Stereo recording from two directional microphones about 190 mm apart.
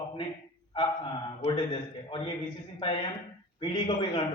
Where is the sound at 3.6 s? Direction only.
25° left (ahead or behind).